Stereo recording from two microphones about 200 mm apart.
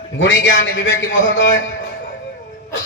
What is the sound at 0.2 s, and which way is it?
A man's voice, 70° left (ahead or behind).